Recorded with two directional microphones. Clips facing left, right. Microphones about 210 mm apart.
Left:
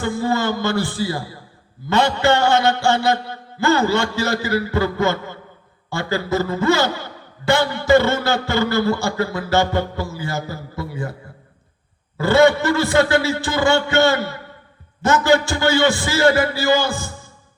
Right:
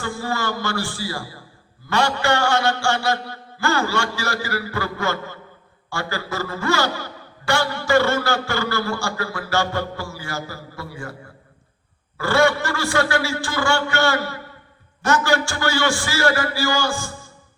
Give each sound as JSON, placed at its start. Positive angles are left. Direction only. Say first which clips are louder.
{"t": 0.0, "sound": "a man's voice", "louder": "left 6 dB", "side_deg": 20}
{"t": 12.1, "sound": "a man's voice", "louder": "left 5 dB", "side_deg": 20}